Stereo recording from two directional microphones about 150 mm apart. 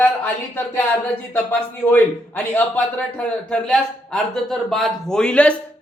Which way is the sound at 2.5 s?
10° left (ahead or behind).